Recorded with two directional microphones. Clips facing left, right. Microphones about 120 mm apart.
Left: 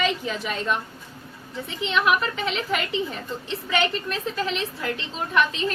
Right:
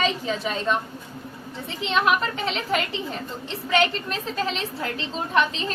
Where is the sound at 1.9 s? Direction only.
35° right (ahead or behind).